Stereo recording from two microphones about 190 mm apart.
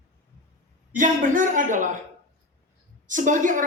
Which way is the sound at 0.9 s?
45° right (ahead or behind).